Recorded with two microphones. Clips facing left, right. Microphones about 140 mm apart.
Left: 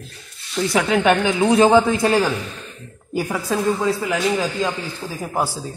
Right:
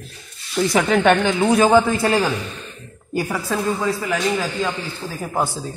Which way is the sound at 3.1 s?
10° left (ahead or behind).